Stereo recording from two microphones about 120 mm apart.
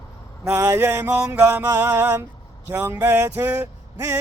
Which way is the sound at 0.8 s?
15° right (ahead or behind).